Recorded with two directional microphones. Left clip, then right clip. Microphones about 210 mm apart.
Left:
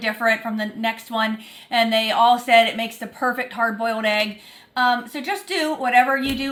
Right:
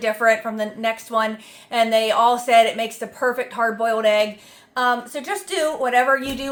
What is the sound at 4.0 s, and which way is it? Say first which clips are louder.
Speech: right 3 dB; 20° right (ahead or behind).